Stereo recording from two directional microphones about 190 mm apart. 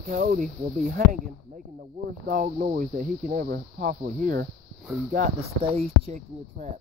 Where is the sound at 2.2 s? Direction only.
45° right (ahead or behind).